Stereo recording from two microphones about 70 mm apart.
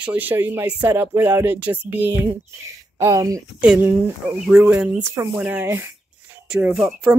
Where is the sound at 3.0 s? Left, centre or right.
Right.